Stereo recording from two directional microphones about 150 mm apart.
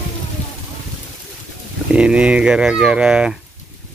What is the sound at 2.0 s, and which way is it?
Speech, 5° right (ahead or behind).